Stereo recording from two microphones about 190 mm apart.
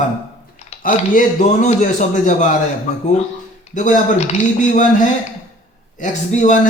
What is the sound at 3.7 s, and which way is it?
Speech, 40° left (ahead or behind).